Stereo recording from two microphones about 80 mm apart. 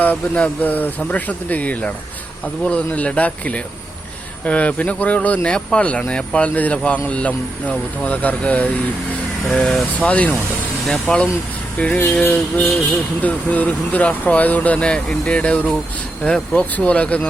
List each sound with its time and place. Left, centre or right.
0.0 s speech: centre
9.5 s speech: centre
11.1 s speech: centre
11.8 s speech: centre